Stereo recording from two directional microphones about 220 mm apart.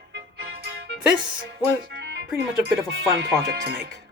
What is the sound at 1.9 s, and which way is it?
Music, 55° right (ahead or behind).